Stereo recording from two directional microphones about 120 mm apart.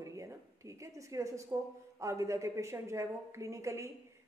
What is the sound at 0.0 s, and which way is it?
A woman's voice, 25° right (ahead or behind).